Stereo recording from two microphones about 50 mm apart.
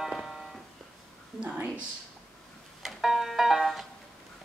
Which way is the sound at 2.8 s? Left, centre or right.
Centre.